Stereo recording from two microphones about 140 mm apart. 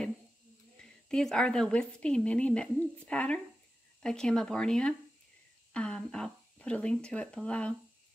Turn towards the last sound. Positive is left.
turn(degrees=10)  # may be behind; listen again after turning